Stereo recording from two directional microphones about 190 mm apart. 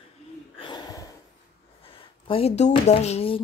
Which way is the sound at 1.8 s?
30° left (ahead or behind).